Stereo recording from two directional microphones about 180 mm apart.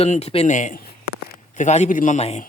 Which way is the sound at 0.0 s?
35° left (ahead or behind).